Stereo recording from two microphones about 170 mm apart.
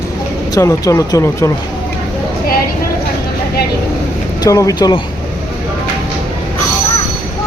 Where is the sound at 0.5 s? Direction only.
20° left (ahead or behind).